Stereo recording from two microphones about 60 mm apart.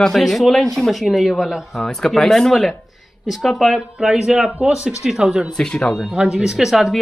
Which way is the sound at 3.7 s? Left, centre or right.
Centre.